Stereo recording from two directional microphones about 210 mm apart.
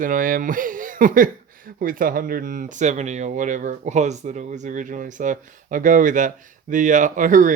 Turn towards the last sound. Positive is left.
turn(degrees=-40)  # may be behind; listen again after turning